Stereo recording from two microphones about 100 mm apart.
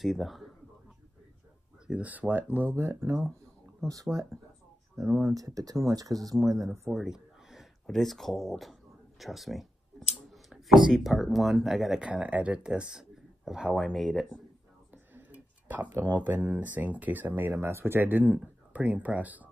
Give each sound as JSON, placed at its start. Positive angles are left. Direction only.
{"t": 0.0, "sound": "speech", "side_deg": 0}
{"t": 1.9, "sound": "speech", "side_deg": -15}
{"t": 3.8, "sound": "speech", "side_deg": -35}
{"t": 6.9, "sound": "a sound", "side_deg": -5}
{"t": 7.8, "sound": "speech", "side_deg": 5}
{"t": 9.2, "sound": "a sound", "side_deg": 0}
{"t": 10.3, "sound": "speech", "side_deg": -5}
{"t": 15.1, "sound": "speech", "side_deg": -15}